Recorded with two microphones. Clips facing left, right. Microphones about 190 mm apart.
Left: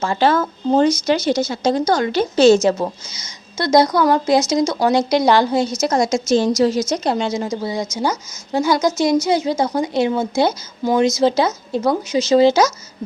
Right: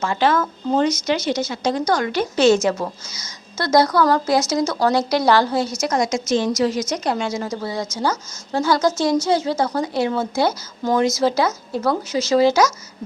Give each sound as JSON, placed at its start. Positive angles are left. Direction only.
{"t": 0.0, "sound": "a woman's voice", "side_deg": 30}